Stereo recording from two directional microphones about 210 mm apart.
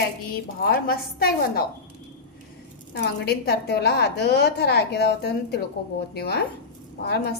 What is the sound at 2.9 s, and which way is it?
A woman's voice, 50° left (ahead or behind).